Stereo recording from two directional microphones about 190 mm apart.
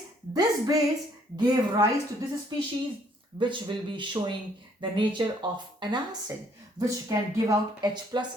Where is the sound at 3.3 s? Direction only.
25° right (ahead or behind).